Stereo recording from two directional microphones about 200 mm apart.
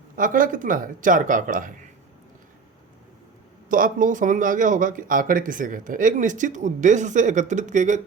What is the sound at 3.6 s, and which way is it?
Speech, 40° right (ahead or behind).